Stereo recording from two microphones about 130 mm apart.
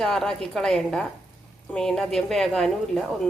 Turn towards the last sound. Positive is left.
turn(degrees=5)  # may be behind; listen again after turning